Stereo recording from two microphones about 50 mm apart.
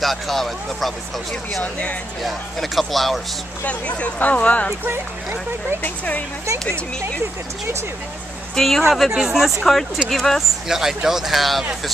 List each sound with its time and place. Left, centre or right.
0.0 s speech: centre
1.6 s speech: left
2.2 s speech: centre
3.6 s speech: left
5.8 s speech: left
8.5 s speech: centre
9.6 s speech: centre
10.7 s speech: centre